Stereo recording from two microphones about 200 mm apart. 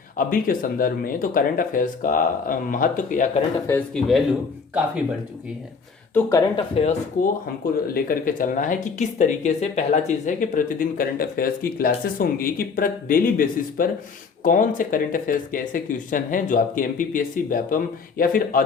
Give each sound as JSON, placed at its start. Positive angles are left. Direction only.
{"t": 0.2, "sound": "speech", "side_deg": 45}
{"t": 3.7, "sound": "speech", "side_deg": 10}
{"t": 6.1, "sound": "speech", "side_deg": 15}
{"t": 6.7, "sound": "speech", "side_deg": 35}
{"t": 7.9, "sound": "speech", "side_deg": 45}